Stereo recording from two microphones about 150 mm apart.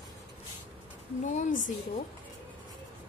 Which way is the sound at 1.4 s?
55° left (ahead or behind).